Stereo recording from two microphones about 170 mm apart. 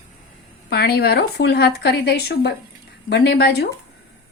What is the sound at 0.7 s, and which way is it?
Speech, 65° left (ahead or behind).